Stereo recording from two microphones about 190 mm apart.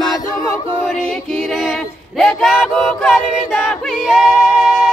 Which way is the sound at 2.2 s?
Centre (ahead or behind).